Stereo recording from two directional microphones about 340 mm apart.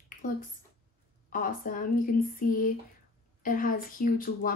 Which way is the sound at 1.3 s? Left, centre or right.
Left.